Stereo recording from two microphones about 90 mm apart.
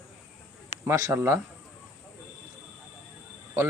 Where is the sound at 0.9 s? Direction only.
30° right (ahead or behind).